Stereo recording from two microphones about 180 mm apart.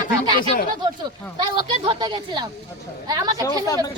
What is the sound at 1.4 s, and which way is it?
Speech, 25° right (ahead or behind).